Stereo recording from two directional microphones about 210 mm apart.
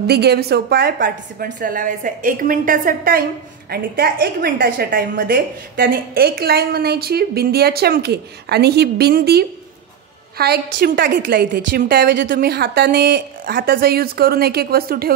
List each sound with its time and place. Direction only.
0.0 s a woman's voice: 50° right (ahead or behind)